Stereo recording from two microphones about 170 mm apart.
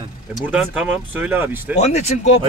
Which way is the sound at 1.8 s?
40° left (ahead or behind).